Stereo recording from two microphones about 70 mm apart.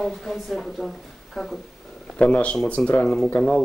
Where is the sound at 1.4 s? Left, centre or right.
Centre.